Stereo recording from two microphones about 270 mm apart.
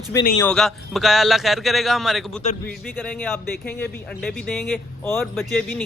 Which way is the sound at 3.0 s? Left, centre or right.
Centre.